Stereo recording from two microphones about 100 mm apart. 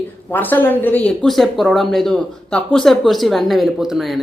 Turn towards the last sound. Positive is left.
turn(degrees=0)  # may be behind; listen again after turning